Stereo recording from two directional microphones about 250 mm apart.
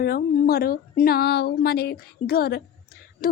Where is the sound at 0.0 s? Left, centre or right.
Left.